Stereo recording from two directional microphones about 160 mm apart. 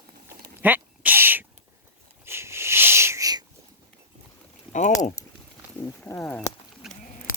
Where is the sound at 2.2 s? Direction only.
15° right (ahead or behind).